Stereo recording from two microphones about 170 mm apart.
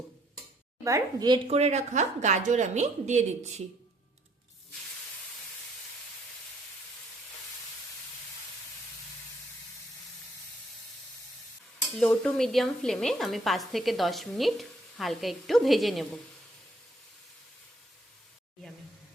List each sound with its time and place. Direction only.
0.9 s a woman's voice: 20° right (ahead or behind)
1.5 s a woman's voice: 40° right (ahead or behind)
11.9 s a woman's voice: 5° left (ahead or behind)